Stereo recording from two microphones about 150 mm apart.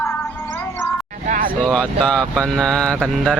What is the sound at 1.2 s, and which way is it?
Speech, 60° right (ahead or behind).